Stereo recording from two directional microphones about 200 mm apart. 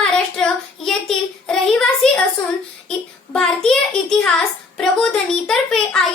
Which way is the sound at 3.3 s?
5° left (ahead or behind).